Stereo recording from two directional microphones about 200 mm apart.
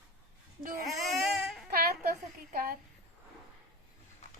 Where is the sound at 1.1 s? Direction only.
Centre (ahead or behind).